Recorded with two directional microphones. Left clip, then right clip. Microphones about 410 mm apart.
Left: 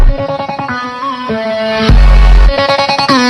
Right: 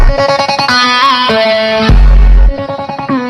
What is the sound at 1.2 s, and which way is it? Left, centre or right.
Music, right.